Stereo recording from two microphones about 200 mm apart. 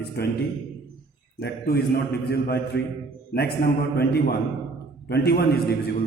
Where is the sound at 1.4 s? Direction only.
55° left (ahead or behind).